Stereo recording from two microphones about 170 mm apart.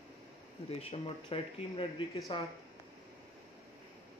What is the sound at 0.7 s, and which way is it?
Speech, 35° left (ahead or behind).